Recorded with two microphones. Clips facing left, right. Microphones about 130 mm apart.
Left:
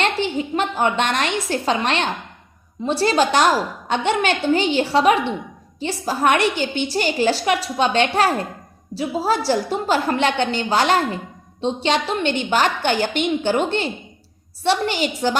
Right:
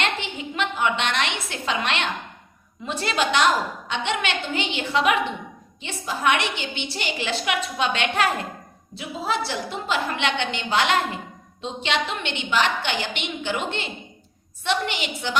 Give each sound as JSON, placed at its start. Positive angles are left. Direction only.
{"t": 0.0, "sound": "a woman's voice", "side_deg": 35}